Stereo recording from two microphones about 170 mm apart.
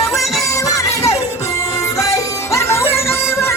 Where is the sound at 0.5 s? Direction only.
20° left (ahead or behind).